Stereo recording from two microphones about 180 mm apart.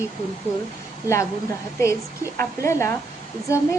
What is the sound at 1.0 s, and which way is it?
Speech, 15° left (ahead or behind).